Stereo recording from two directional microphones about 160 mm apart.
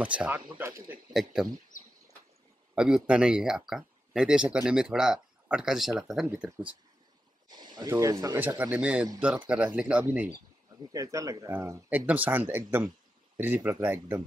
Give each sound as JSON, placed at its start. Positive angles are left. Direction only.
{"t": 0.0, "sound": "speech", "side_deg": -10}
{"t": 1.3, "sound": "speech", "side_deg": -5}
{"t": 2.7, "sound": "speech", "side_deg": -5}
{"t": 7.4, "sound": "a sound", "side_deg": -25}
{"t": 7.9, "sound": "speech", "side_deg": -20}
{"t": 8.4, "sound": "speech", "side_deg": -10}
{"t": 10.9, "sound": "speech", "side_deg": -20}